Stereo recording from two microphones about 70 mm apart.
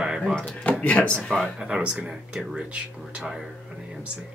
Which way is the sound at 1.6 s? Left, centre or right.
Centre.